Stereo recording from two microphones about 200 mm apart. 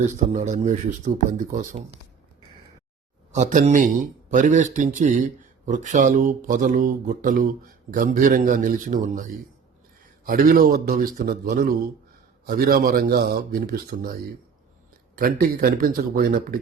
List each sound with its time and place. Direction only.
0.3 s a man's voice: 35° right (ahead or behind)
3.3 s a man's voice: 40° right (ahead or behind)
10.2 s speech: 45° right (ahead or behind)
15.1 s speech: 45° right (ahead or behind)